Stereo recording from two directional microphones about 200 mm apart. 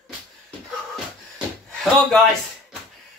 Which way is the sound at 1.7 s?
Centre (ahead or behind).